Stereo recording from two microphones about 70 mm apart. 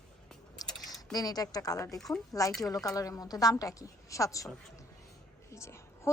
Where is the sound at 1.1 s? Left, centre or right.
Left.